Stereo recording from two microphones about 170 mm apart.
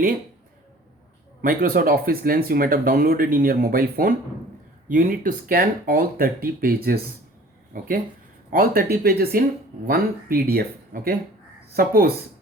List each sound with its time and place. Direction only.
1.4 s speech: 60° right (ahead or behind)
7.7 s speech: 55° right (ahead or behind)